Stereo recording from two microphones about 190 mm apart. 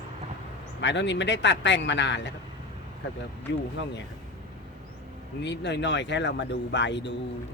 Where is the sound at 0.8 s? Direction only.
70° left (ahead or behind).